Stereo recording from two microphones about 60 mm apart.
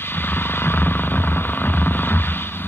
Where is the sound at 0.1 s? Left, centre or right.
Left.